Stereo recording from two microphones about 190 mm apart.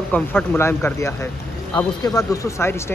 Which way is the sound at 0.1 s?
10° left (ahead or behind).